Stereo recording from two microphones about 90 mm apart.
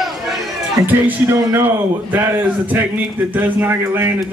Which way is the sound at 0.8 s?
35° right (ahead or behind).